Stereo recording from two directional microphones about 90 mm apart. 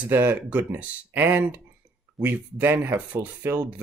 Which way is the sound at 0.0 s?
20° right (ahead or behind).